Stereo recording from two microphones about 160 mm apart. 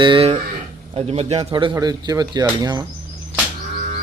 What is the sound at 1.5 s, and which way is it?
Speech, 25° right (ahead or behind).